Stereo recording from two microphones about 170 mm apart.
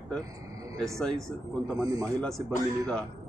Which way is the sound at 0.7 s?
Centre (ahead or behind).